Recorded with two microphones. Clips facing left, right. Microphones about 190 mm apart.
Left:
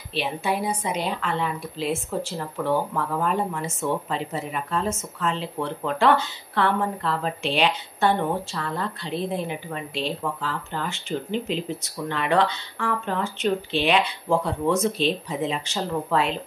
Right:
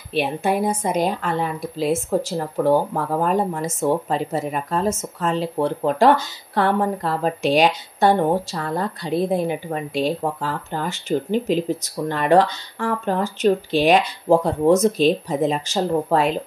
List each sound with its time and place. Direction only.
0.1 s a woman's voice: 50° right (ahead or behind)